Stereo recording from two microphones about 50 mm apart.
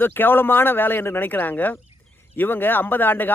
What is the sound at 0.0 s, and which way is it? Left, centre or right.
Speech, left.